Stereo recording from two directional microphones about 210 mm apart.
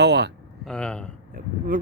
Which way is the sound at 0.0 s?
55° right (ahead or behind).